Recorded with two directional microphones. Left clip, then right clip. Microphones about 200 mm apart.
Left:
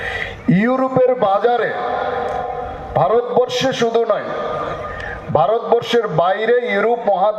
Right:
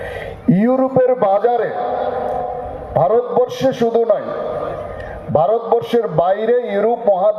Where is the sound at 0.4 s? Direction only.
60° right (ahead or behind).